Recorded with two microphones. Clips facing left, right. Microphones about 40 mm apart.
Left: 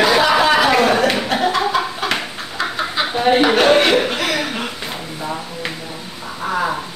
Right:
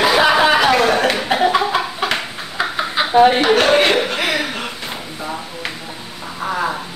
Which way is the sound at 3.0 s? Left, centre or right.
Centre.